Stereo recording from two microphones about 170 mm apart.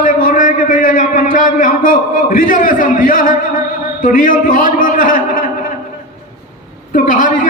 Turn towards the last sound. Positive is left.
turn(degrees=50)  # may be behind; listen again after turning